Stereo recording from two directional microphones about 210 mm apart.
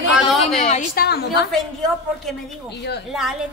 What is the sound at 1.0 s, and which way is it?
Speech, 50° left (ahead or behind).